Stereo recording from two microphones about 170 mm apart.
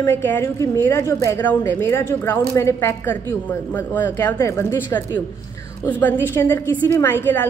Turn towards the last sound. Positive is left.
turn(degrees=10)  # may be behind; listen again after turning